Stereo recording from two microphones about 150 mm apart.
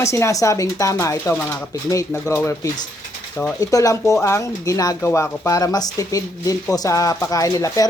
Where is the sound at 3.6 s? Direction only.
25° left (ahead or behind).